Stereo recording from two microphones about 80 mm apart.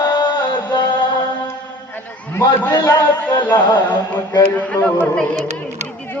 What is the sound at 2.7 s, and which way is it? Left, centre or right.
A man's voice, left.